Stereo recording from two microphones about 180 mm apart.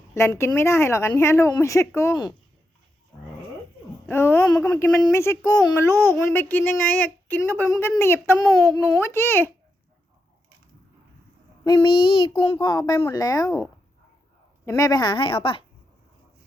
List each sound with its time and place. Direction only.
0.1 s speech: 15° left (ahead or behind)
4.0 s speech: 15° left (ahead or behind)
11.6 s speech: 25° left (ahead or behind)